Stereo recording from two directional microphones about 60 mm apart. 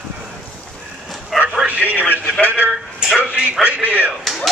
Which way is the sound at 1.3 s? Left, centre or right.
Centre.